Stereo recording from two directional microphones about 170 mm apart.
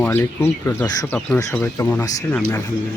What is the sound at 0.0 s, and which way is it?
Speech, 15° left (ahead or behind).